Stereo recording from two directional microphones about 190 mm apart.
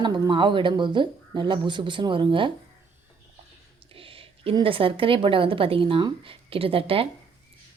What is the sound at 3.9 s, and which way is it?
A woman's voice, 30° right (ahead or behind).